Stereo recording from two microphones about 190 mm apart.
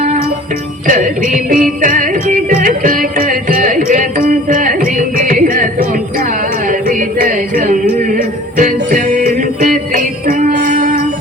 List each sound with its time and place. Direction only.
0.9 s music: 45° right (ahead or behind)
10.5 s jingle bell: 45° right (ahead or behind)